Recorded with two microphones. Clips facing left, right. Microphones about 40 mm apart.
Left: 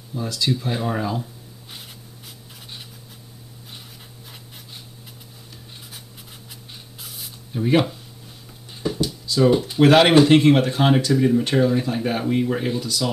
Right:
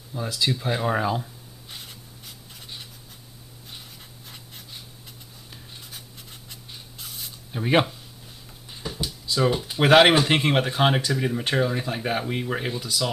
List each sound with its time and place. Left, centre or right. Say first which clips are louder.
0.1 s speech: left 2 dB; centre
1.7 s spray: even; centre
6.5 s spray: even; centre
7.5 s speech: left 2 dB; right
8.8 s a sound: left 8 dB; centre
9.3 s speech: left 5 dB; centre